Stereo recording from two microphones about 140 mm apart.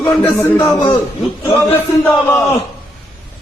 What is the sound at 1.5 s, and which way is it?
Speech, 15° left (ahead or behind).